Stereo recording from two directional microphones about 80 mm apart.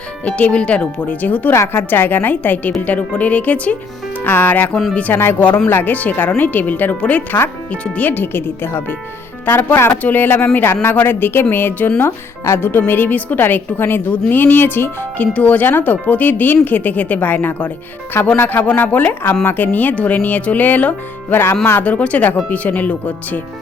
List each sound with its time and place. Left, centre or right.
0.3 s speech: centre
15.3 s speech: centre